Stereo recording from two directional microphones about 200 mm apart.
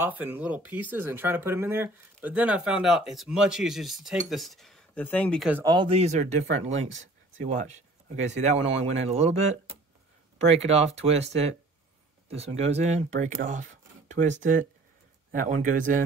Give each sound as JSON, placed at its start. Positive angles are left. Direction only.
{"t": 0.0, "sound": "speech", "side_deg": -10}
{"t": 5.5, "sound": "speech", "side_deg": -15}
{"t": 13.4, "sound": "a sound", "side_deg": -40}
{"t": 14.4, "sound": "speech", "side_deg": -40}